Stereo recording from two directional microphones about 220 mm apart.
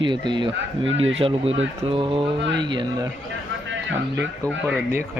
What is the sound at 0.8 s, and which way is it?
Speech, 60° right (ahead or behind).